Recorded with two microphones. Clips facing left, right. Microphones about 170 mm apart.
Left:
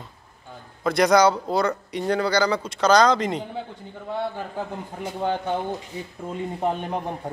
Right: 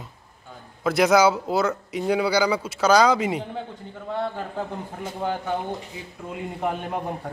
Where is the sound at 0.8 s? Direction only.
5° right (ahead or behind).